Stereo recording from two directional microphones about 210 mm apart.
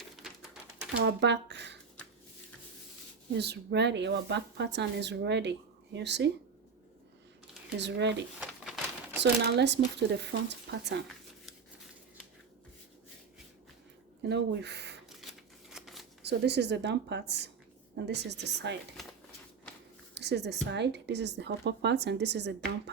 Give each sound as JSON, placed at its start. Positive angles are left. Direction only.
{"t": 0.2, "sound": "bird", "side_deg": -5}
{"t": 1.0, "sound": "speech", "side_deg": -55}
{"t": 3.3, "sound": "speech", "side_deg": -50}
{"t": 7.8, "sound": "speech", "side_deg": -55}
{"t": 8.4, "sound": "a sound", "side_deg": -5}
{"t": 9.2, "sound": "a woman's voice", "side_deg": -55}
{"t": 14.3, "sound": "a woman's voice", "side_deg": -55}
{"t": 15.1, "sound": "a sound", "side_deg": 0}
{"t": 16.2, "sound": "a woman's voice", "side_deg": -55}
{"t": 19.0, "sound": "a sound", "side_deg": 0}
{"t": 20.1, "sound": "speech", "side_deg": -55}